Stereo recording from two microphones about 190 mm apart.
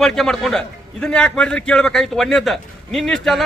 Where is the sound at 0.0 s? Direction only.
Centre (ahead or behind).